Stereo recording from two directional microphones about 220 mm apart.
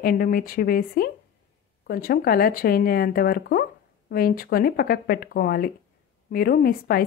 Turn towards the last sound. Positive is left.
turn(degrees=40)  # may be behind; listen again after turning